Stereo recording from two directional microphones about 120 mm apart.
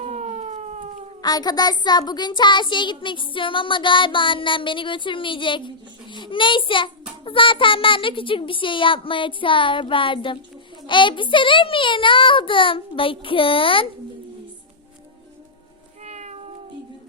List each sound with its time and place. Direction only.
0.0 s a sound: 65° right (ahead or behind)
1.2 s a child's voice: 35° left (ahead or behind)
16.0 s cat: 70° right (ahead or behind)